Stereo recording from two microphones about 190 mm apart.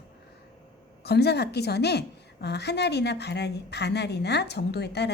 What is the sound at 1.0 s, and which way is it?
A woman's voice, 60° left (ahead or behind).